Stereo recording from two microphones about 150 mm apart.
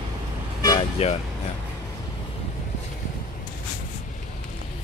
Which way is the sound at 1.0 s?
40° left (ahead or behind).